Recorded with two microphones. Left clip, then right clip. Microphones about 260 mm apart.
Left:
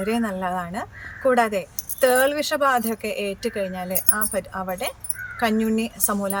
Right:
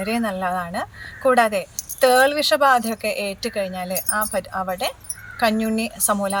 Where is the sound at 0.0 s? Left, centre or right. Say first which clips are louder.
Right 2 dB; centre.